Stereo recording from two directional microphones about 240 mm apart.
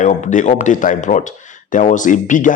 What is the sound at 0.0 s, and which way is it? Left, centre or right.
Speech, left.